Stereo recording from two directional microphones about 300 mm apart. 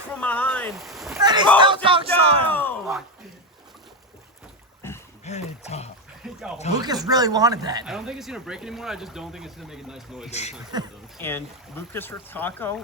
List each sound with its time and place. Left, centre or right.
0.1 s boat: centre
1.2 s a sound: centre
1.5 s speech: centre
2.5 s a sound: centre
4.8 s boat: centre
5.2 s speech: left
6.2 s speech: centre
6.7 s speech: centre
7.9 s speech: centre
10.2 s speech: left
11.2 s speech: centre